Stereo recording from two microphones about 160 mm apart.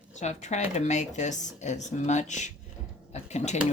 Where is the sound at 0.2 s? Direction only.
45° left (ahead or behind).